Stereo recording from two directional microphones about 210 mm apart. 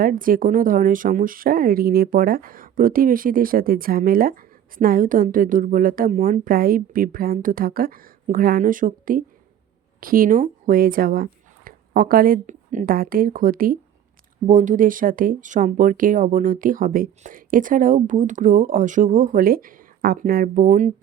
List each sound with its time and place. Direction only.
0.0 s speech: 40° right (ahead or behind)